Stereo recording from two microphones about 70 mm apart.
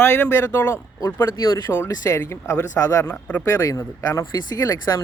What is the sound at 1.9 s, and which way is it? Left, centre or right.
Speech, left.